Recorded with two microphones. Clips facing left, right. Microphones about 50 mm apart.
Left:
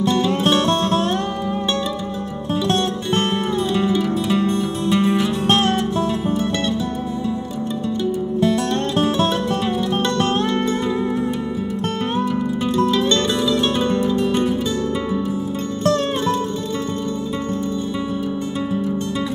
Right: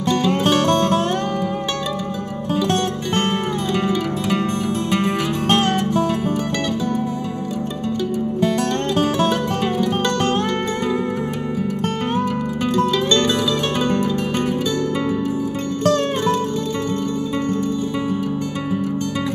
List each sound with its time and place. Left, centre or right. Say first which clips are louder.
4.4 s music: left 1 dB; right
13.9 s music: left 2 dB; right